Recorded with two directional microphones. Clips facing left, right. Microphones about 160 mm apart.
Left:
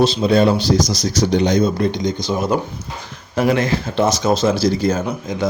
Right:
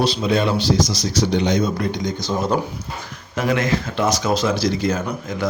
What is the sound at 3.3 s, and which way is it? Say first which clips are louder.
Speech: left 3 dB; 30° left (ahead or behind).